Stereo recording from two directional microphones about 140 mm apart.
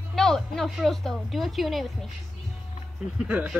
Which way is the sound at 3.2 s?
10° right (ahead or behind).